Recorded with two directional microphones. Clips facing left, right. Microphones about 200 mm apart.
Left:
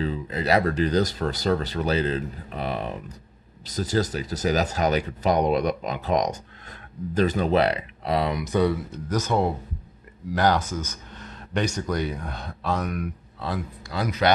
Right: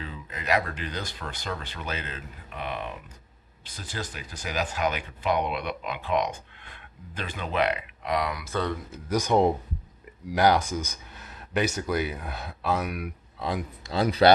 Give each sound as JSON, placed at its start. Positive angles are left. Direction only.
{"t": 0.0, "sound": "speech", "side_deg": 35}
{"t": 8.9, "sound": "speech", "side_deg": -10}
{"t": 13.9, "sound": "speech", "side_deg": -30}